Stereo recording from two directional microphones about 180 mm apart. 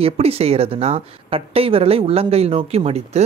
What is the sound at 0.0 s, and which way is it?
Speech, 35° right (ahead or behind).